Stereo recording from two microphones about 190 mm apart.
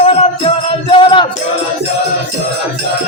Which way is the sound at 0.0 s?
30° left (ahead or behind).